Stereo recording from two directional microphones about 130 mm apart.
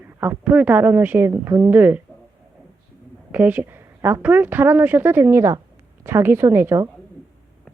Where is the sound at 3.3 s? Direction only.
15° right (ahead or behind).